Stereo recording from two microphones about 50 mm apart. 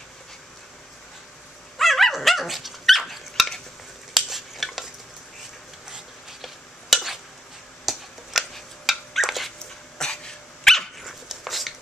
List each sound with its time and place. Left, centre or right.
1.8 s dog: centre
4.1 s stir: centre
6.4 s stir: centre
7.8 s a sound: centre
8.5 s dog: centre
9.9 s dog: centre
11.1 s a sound: centre